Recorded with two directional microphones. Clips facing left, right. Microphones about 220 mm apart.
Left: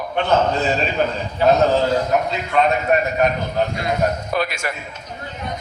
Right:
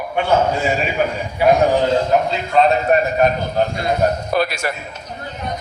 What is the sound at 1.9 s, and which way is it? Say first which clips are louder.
A man's voice: right 3 dB; 30° right (ahead or behind).